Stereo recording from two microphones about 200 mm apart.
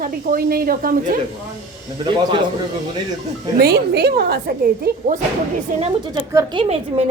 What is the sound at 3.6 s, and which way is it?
A woman's voice, 55° right (ahead or behind).